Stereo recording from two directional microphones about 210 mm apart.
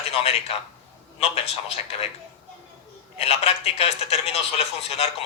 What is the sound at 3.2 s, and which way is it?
A man's voice, 30° left (ahead or behind).